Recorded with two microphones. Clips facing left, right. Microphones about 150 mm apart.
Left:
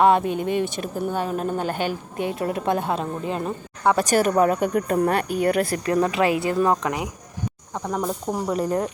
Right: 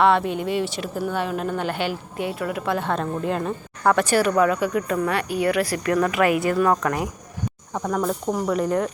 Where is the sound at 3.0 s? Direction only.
5° left (ahead or behind).